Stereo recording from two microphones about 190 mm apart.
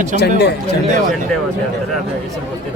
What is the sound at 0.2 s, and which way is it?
Speech, 60° left (ahead or behind).